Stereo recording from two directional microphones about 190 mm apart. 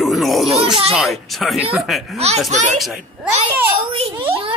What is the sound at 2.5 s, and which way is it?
Speech, 40° right (ahead or behind).